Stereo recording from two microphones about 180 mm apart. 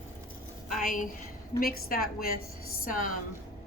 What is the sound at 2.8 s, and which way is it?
Chopping, 45° left (ahead or behind).